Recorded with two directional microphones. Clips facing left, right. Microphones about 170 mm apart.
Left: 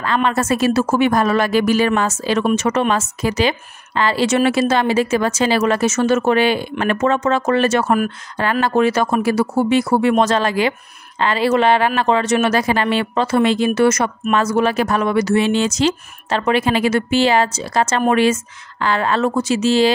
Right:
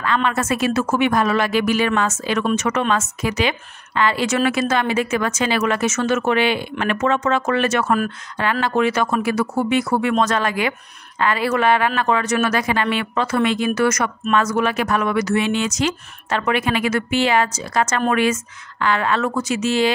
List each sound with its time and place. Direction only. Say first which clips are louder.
0.0 s a woman's voice: left 2 dB; 35° left (ahead or behind)